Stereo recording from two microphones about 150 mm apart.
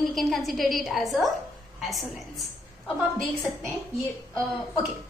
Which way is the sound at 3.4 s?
20° left (ahead or behind).